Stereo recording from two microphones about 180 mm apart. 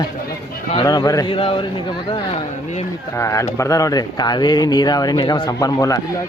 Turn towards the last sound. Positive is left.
turn(degrees=20)  # may be behind; listen again after turning